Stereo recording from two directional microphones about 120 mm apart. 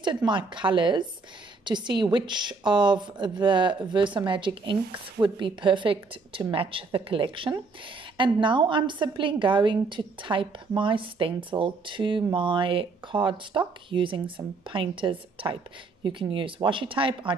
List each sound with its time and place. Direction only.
0.0 s a woman's voice: 40° right (ahead or behind)